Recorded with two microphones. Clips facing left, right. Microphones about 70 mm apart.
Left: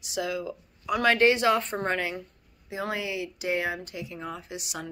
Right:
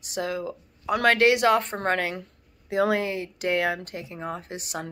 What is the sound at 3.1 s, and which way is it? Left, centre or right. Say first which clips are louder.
Speech: right 3 dB; right.